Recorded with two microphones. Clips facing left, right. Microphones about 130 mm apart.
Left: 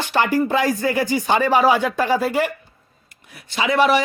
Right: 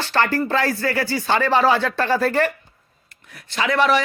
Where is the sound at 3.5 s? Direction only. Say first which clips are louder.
Left 2 dB; 5° left (ahead or behind).